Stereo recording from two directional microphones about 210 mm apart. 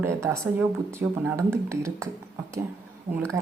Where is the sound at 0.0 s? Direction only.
10° right (ahead or behind).